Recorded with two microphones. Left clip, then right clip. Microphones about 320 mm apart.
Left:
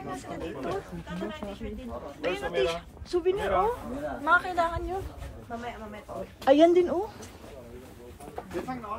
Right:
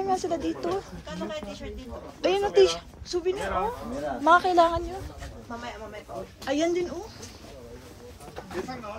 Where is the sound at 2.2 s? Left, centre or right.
Centre.